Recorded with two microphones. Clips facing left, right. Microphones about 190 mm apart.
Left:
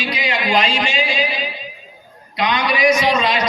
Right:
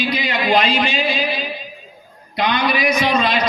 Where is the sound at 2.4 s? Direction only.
60° right (ahead or behind).